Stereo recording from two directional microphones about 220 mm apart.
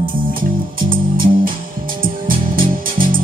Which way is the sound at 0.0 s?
40° right (ahead or behind).